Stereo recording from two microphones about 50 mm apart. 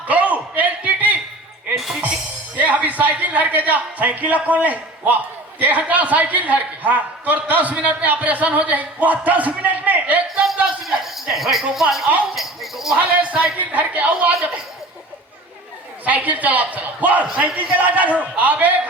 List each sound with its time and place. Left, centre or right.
0.1 s a sound: right
1.7 s music: centre
2.6 s a man's voice: right
11.0 s speech: centre
12.3 s a sound: centre
13.0 s a man's voice: right
16.0 s a man's voice: right